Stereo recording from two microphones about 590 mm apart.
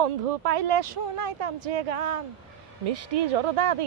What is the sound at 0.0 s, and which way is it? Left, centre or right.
Speech, right.